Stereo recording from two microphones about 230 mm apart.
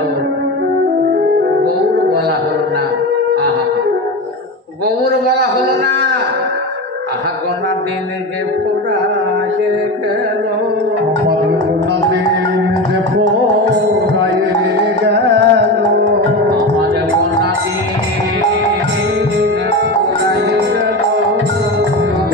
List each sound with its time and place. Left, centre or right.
15.0 s music: right